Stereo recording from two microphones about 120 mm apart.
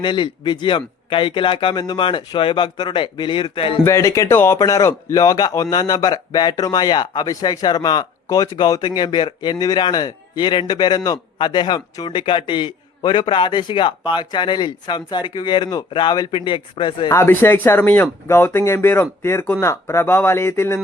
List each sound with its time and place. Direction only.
0.0 s speech: 40° left (ahead or behind)
3.8 s speech: 25° left (ahead or behind); by 17.1 s 45° left (ahead or behind)
17.1 s speech: 20° left (ahead or behind)